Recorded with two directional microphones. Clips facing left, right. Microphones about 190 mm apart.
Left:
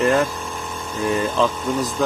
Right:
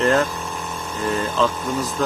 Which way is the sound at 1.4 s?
15° left (ahead or behind).